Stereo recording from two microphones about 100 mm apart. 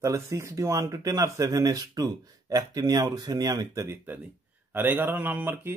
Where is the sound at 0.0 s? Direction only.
30° right (ahead or behind).